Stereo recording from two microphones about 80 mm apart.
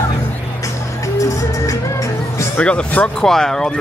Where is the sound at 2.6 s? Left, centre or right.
Centre.